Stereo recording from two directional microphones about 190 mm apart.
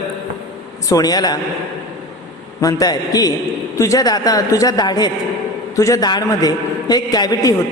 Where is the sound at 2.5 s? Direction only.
20° left (ahead or behind).